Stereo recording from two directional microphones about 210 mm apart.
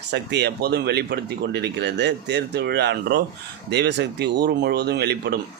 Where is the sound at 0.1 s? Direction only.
55° right (ahead or behind).